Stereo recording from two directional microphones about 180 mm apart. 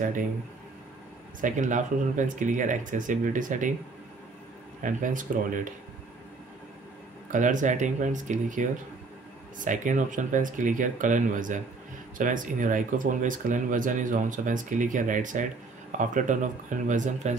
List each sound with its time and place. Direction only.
1.4 s speech: 45° right (ahead or behind)
4.8 s speech: 45° right (ahead or behind)
7.3 s speech: 45° right (ahead or behind)
9.7 s speech: 45° right (ahead or behind)